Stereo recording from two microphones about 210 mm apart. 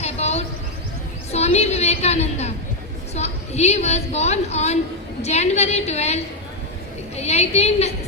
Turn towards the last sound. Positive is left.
turn(degrees=30)  # may be behind; listen again after turning